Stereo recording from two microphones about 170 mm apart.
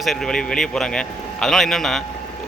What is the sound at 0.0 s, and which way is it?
Speech, centre (ahead or behind).